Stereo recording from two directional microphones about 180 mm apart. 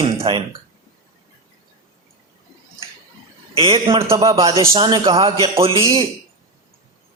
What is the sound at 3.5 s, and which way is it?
Speech, 30° right (ahead or behind).